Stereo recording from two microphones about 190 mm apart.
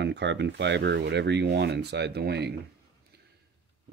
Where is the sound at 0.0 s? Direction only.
65° right (ahead or behind).